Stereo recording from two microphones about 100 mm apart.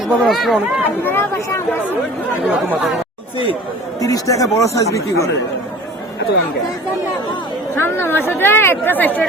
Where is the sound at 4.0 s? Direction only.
35° left (ahead or behind).